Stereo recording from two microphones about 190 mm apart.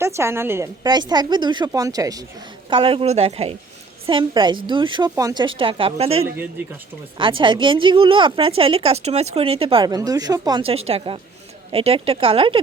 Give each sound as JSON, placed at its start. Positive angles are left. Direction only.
{"t": 0.0, "sound": "a woman's voice", "side_deg": -15}
{"t": 10.8, "sound": "a woman's voice", "side_deg": -30}